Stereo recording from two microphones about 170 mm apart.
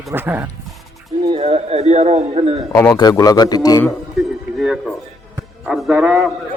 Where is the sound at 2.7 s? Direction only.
20° left (ahead or behind).